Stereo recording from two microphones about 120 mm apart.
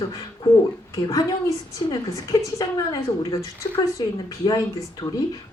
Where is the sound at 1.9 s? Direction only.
30° left (ahead or behind).